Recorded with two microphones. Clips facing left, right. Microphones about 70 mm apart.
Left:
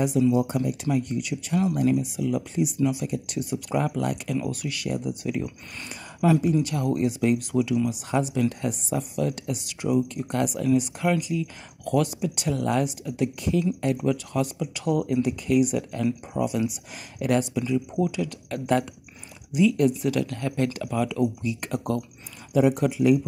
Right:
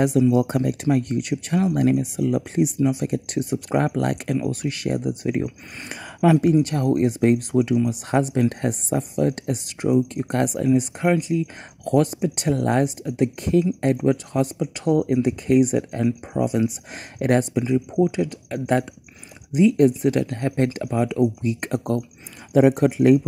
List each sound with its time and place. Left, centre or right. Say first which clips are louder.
0.3 s speech: right 4 dB; right
4.5 s speech: right 5 dB; right
17.6 s speech: right 5 dB; right